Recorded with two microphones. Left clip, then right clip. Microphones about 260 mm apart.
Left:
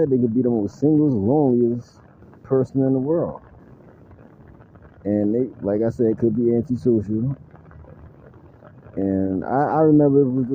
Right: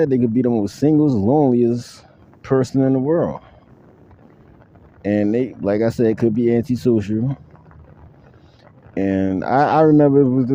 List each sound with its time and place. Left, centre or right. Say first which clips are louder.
0.0 s speech: right 2 dB; right
2.4 s a sound: right 2 dB; right
2.7 s speech: right 3 dB; right
5.0 s speech: right 2 dB; right
9.0 s speech: right 3 dB; right